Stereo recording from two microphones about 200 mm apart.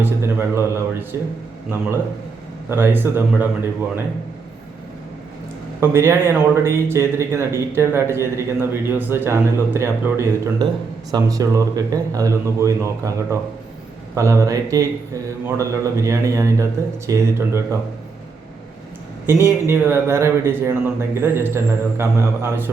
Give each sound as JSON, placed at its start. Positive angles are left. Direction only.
{"t": 0.0, "sound": "a man's voice", "side_deg": -10}
{"t": 2.6, "sound": "speech", "side_deg": -10}
{"t": 5.8, "sound": "speech", "side_deg": -15}
{"t": 19.6, "sound": "speech", "side_deg": -10}